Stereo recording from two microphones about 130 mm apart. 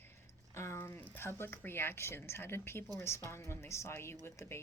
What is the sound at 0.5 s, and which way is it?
A woman's voice, 20° left (ahead or behind).